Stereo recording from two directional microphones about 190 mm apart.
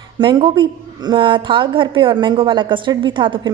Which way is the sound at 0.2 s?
25° right (ahead or behind).